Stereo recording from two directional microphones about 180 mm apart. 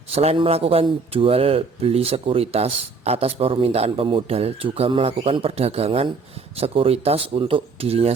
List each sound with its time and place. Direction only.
0.1 s speech: 35° right (ahead or behind)